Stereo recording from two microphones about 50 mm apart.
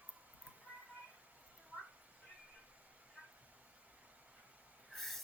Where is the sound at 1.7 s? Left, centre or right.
Right.